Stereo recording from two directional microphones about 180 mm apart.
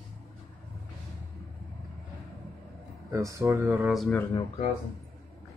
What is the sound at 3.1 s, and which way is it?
Speech, 15° right (ahead or behind).